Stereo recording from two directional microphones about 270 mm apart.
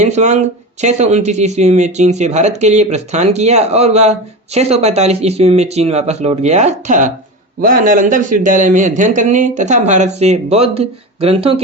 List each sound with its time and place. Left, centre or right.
0.0 s speech: right